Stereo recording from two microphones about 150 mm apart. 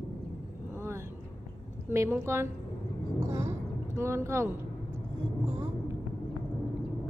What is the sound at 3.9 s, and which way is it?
Speech, 15° right (ahead or behind).